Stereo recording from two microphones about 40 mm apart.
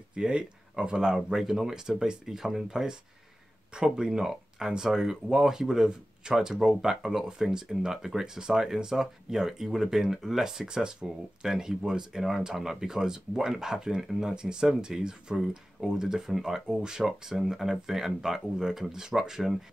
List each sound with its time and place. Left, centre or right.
0.1 s speech: right
16.6 s speech: right